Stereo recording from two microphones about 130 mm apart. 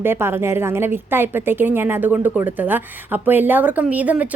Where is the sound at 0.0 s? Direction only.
20° right (ahead or behind).